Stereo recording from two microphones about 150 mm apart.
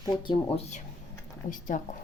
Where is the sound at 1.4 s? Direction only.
60° left (ahead or behind).